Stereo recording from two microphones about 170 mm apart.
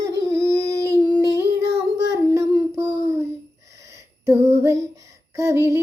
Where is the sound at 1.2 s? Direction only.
20° right (ahead or behind).